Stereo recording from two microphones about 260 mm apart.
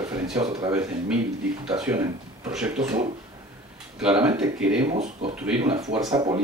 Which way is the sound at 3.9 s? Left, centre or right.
Centre.